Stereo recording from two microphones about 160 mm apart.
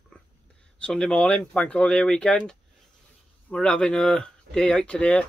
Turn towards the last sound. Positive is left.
turn(degrees=5)  # may be behind; listen again after turning